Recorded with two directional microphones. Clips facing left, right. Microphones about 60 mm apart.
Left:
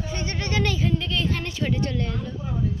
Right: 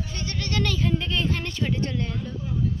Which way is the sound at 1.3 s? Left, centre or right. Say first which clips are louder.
Left 1 dB; centre.